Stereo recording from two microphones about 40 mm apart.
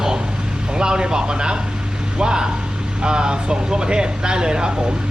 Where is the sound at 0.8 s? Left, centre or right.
Centre.